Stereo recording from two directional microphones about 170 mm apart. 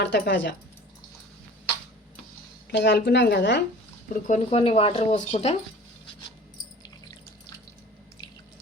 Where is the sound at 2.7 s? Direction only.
80° left.